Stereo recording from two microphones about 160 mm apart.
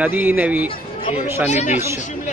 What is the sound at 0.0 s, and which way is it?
Speech, 10° right (ahead or behind).